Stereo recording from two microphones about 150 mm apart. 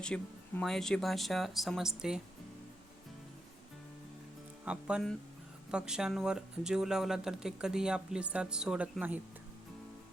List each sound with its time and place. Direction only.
0.0 s speech: 5° left (ahead or behind)
4.6 s speech: 5° right (ahead or behind)